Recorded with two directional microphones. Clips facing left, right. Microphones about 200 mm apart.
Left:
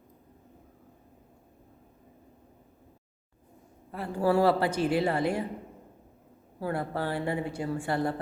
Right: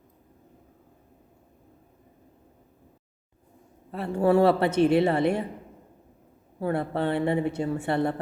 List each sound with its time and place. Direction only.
3.9 s a woman's voice: 25° right (ahead or behind)
6.6 s a woman's voice: 25° right (ahead or behind)